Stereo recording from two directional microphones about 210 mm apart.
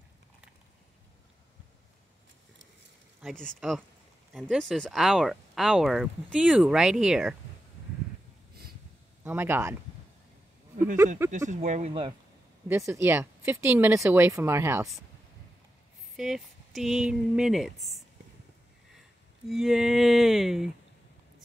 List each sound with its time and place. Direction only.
3.2 s speech: centre (ahead or behind)
9.2 s speech: 10° right (ahead or behind)
11.3 s speech: 35° right (ahead or behind)
12.6 s speech: 15° right (ahead or behind)
16.2 s speech: centre (ahead or behind)
19.5 s speech: centre (ahead or behind)